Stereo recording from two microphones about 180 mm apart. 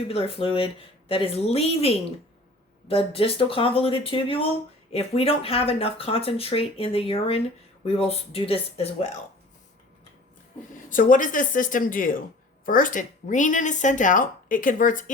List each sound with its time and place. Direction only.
0.1 s speech: 30° left (ahead or behind)
10.8 s speech: 45° left (ahead or behind)